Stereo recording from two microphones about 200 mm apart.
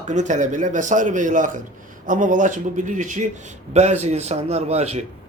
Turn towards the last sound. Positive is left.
turn(degrees=-35)  # may be behind; listen again after turning